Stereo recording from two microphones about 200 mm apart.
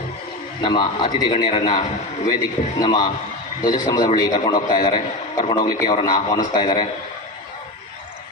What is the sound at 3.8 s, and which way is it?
A man's voice, 20° left (ahead or behind).